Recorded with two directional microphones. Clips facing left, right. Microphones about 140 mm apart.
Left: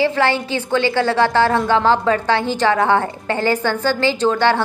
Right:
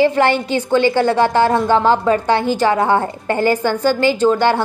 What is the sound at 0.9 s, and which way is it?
Speech, 15° right (ahead or behind).